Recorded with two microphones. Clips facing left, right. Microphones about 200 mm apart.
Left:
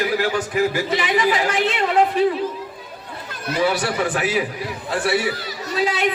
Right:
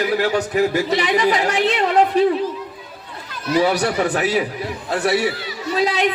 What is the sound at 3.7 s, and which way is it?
A man's voice, 40° right (ahead or behind).